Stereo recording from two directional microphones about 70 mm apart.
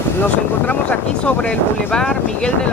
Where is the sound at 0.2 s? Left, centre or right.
Left.